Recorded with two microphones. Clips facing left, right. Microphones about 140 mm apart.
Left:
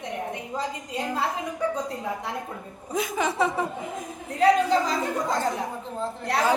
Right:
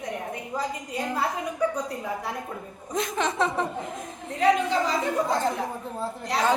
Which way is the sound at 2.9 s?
5° left (ahead or behind).